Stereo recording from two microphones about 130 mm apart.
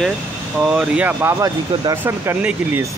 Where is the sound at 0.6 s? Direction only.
10° right (ahead or behind).